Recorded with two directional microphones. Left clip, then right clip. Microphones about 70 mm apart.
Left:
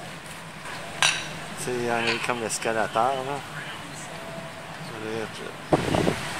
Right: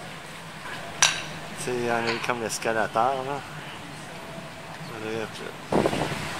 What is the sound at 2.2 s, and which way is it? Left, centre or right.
Speech, centre.